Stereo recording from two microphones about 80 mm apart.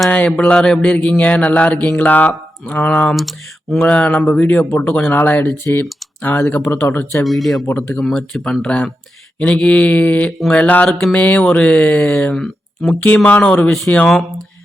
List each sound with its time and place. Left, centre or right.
0.1 s mantra: centre
3.2 s speech: centre
3.8 s mantra: centre
4.7 s speech: centre
7.3 s speech: centre
8.0 s mantra: centre
10.8 s speech: centre
11.1 s mantra: centre